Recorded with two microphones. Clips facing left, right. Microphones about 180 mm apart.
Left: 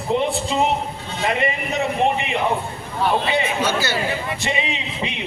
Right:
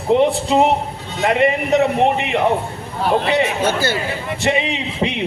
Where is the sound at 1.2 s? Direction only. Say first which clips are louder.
Right 7 dB; 70° right (ahead or behind).